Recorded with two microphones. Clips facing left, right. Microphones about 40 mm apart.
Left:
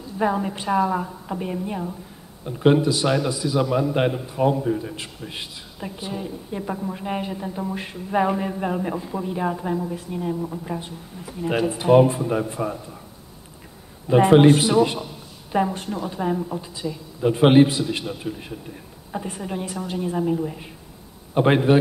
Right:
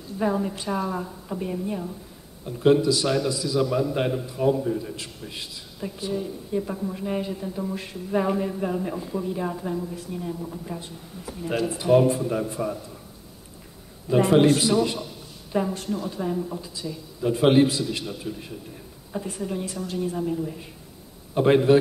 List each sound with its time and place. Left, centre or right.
0.2 s a woman's voice: left
14.0 s a woman's voice: left